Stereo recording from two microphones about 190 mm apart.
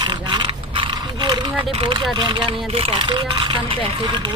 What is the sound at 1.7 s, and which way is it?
Speech, 25° right (ahead or behind).